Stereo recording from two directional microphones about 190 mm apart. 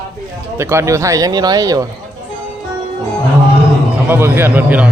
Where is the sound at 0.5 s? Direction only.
15° right (ahead or behind).